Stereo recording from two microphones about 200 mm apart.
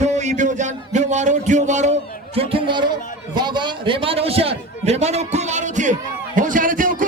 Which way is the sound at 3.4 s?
20° right (ahead or behind).